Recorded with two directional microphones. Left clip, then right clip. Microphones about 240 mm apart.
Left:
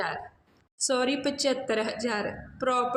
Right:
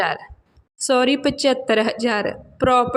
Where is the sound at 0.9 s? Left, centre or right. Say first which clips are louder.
Right 9 dB; right.